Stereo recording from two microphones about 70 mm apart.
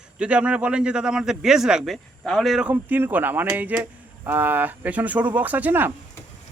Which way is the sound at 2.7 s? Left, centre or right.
Right.